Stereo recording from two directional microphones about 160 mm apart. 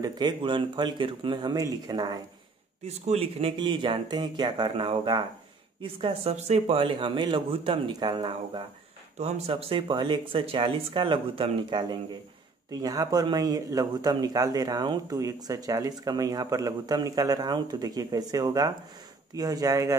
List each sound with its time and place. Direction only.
0.0 s speech: 25° right (ahead or behind)
3.1 s speech: 35° right (ahead or behind); by 20.0 s 20° right (ahead or behind)